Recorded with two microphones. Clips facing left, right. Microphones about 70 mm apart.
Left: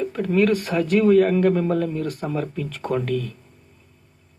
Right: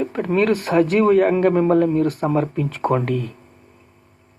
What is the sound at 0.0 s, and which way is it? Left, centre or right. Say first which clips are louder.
Speech: right 1 dB; right.